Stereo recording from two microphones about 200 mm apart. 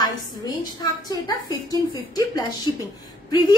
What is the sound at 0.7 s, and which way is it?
A woman's voice, 20° left (ahead or behind).